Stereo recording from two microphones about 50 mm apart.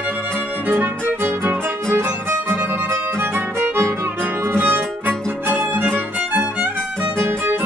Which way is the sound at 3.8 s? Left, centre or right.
Right.